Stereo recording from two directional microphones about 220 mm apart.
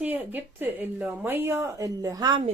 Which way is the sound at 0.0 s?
10° right (ahead or behind).